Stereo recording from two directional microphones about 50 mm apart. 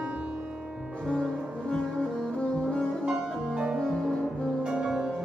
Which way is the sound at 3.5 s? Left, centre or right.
Centre.